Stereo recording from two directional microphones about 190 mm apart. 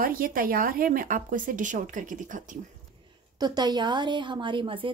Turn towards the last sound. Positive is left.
turn(degrees=-25)  # may be behind; listen again after turning